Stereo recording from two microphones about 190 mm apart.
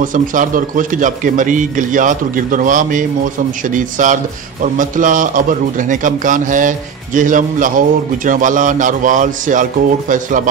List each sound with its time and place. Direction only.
0.0 s a man's voice: 45° right (ahead or behind)